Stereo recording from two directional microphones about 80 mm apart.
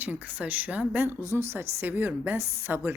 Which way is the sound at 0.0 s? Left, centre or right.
Centre.